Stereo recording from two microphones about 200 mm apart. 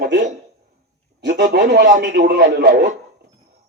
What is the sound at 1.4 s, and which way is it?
Speech, 60° right (ahead or behind).